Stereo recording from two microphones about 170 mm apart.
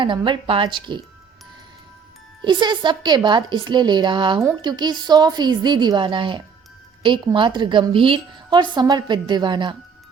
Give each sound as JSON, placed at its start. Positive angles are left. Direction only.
{"t": 0.0, "sound": "a woman's voice", "side_deg": -30}
{"t": 2.4, "sound": "a woman's voice", "side_deg": -25}